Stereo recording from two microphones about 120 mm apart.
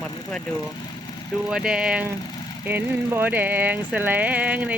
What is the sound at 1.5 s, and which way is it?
Speech, 5° right (ahead or behind).